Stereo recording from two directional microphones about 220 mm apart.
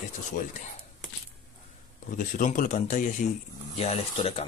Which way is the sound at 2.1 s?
35° left (ahead or behind).